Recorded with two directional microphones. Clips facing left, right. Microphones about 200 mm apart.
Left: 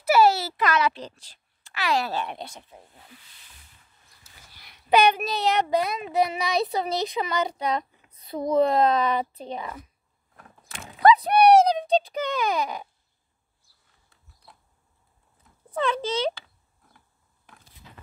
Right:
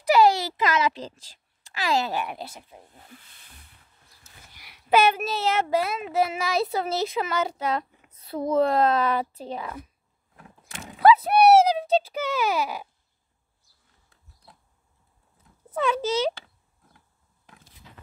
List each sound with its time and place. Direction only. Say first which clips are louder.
0.0 s a sound: even; 15° right (ahead or behind)
1.9 s speech: right 1 dB; 25° right (ahead or behind)
2.1 s speech: even; 5° right (ahead or behind)
3.0 s speech: right 2 dB; 50° right (ahead or behind)
4.6 s speech: even; 10° right (ahead or behind)
8.3 s speech: right 1 dB; 5° left (ahead or behind)
8.6 s speech: even; 5° right (ahead or behind)
11.0 s a sound: even; 5° right (ahead or behind)
15.7 s speech: right 1 dB; 10° right (ahead or behind)